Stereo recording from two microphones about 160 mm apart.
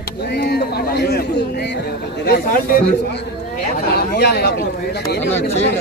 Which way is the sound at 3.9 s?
90° left.